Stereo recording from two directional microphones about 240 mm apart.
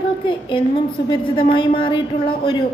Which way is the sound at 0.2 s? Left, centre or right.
Left.